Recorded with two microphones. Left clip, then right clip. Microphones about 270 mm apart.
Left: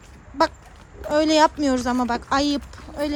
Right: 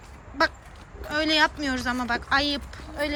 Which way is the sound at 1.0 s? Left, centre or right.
Left.